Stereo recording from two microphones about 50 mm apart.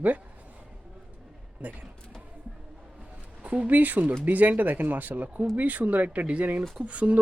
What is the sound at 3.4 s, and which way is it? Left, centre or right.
Speech, right.